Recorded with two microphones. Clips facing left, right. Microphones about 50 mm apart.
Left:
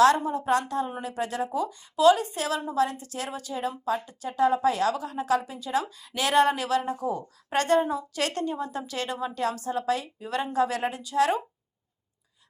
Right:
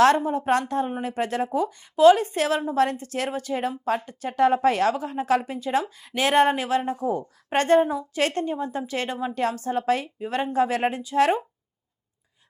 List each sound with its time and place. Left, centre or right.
0.3 s a woman's voice: right